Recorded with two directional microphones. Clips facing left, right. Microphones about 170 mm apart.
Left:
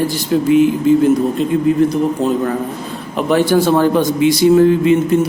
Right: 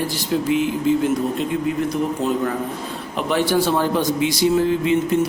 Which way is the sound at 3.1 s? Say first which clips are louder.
Left 6 dB; 50° left (ahead or behind).